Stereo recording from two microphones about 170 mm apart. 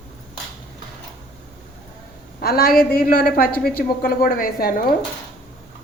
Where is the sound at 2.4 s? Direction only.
65° left (ahead or behind).